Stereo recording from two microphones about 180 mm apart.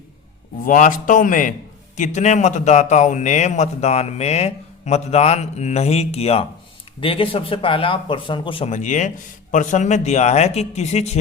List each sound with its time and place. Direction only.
0.6 s a man's voice: 45° left (ahead or behind)